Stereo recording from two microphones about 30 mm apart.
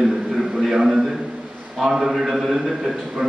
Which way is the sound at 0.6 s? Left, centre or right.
Centre.